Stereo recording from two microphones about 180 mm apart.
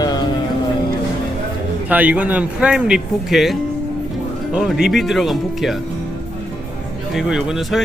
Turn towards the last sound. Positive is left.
turn(degrees=0)  # may be behind; listen again after turning